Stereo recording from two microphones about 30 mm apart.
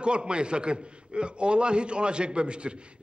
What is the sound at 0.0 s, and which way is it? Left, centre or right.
A man's voice, right.